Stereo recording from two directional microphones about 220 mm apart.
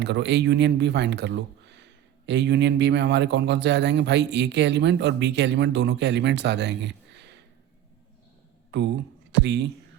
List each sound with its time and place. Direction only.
0.0 s speech: 50° right (ahead or behind)
8.7 s speech: 50° right (ahead or behind)